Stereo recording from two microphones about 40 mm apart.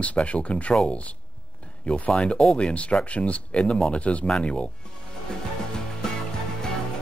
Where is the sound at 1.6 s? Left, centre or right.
Left.